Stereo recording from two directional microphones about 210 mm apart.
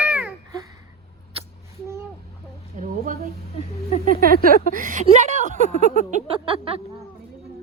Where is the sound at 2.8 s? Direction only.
35° right (ahead or behind).